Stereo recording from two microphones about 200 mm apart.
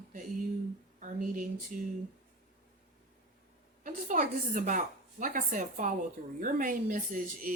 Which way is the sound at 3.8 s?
40° right (ahead or behind).